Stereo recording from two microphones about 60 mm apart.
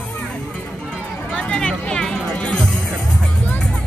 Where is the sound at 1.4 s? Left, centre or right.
Centre.